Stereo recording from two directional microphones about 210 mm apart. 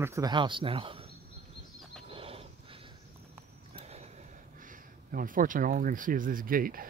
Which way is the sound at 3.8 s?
30° right (ahead or behind).